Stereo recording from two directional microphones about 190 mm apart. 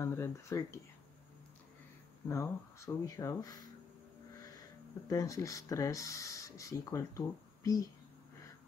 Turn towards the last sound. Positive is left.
turn(degrees=15)  # may be behind; listen again after turning